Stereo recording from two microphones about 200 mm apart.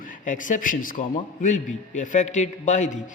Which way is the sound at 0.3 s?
40° left (ahead or behind).